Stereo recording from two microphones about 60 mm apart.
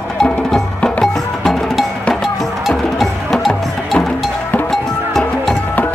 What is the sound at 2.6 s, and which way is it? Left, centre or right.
Music, centre.